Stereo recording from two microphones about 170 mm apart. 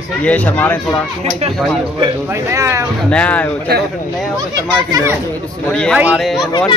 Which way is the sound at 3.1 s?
5° left (ahead or behind).